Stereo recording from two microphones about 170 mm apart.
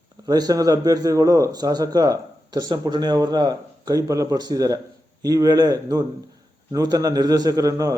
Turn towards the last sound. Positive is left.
turn(degrees=-20)  # may be behind; listen again after turning